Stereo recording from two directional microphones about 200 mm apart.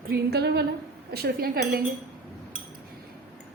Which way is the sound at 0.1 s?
55° right (ahead or behind).